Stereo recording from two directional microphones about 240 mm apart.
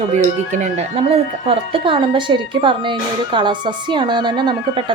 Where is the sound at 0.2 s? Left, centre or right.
Right.